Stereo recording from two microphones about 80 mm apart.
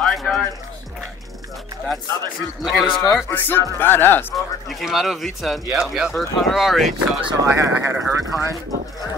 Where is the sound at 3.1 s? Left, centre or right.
Left.